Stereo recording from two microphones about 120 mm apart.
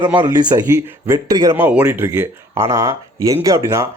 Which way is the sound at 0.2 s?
35° right (ahead or behind).